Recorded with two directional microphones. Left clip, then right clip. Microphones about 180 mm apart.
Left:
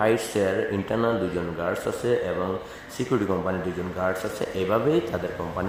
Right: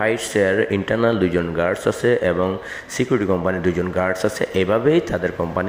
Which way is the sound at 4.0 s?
25° right (ahead or behind).